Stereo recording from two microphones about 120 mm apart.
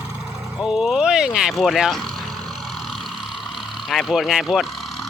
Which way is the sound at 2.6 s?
Centre (ahead or behind).